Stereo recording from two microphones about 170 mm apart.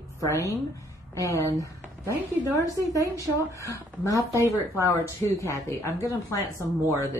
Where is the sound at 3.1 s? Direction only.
20° left (ahead or behind).